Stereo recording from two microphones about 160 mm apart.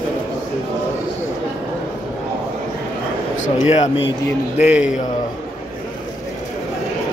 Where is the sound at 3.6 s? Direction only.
45° left (ahead or behind).